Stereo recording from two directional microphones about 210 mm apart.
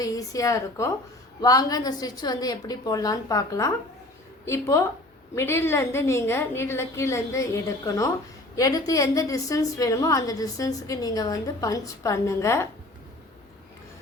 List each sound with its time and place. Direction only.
0.0 s a woman's voice: 15° left (ahead or behind)